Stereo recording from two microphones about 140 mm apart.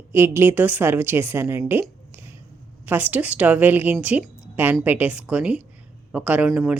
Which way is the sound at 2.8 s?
15° right (ahead or behind).